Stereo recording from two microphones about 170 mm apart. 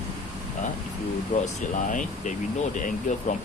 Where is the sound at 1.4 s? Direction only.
50° left (ahead or behind).